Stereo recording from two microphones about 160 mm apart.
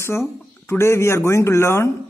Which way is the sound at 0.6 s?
15° left (ahead or behind).